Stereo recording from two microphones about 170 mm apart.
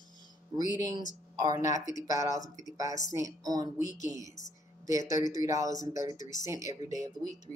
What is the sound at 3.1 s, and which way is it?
Speech, 20° right (ahead or behind).